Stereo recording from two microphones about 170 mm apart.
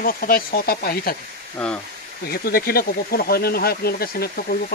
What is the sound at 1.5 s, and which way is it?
Speech, 10° left (ahead or behind).